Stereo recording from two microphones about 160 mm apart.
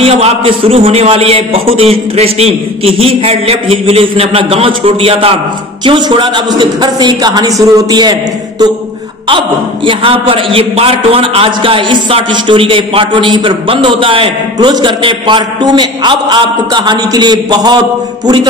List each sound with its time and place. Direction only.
0.0 s a man's voice: 35° right (ahead or behind)
9.8 s a man's voice: 35° right (ahead or behind)